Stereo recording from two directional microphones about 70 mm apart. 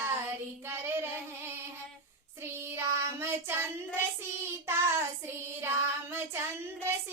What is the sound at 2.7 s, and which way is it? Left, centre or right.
Child singing, right.